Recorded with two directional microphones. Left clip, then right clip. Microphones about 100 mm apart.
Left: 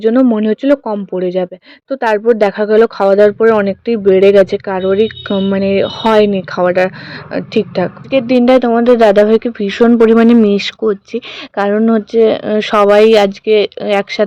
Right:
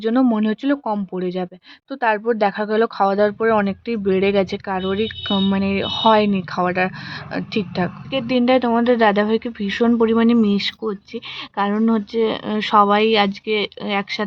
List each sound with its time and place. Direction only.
0.0 s speech: 30° left (ahead or behind)
8.1 s speech: 60° left (ahead or behind)